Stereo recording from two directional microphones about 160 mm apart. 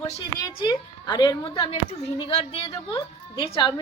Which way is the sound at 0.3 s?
25° left (ahead or behind).